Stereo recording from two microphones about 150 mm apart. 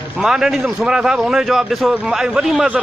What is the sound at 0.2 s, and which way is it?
A man's voice, 5° right (ahead or behind).